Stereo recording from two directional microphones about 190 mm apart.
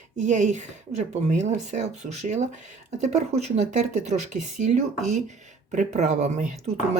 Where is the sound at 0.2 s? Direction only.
40° right (ahead or behind).